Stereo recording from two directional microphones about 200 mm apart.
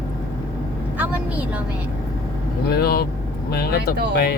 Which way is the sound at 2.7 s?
50° left (ahead or behind).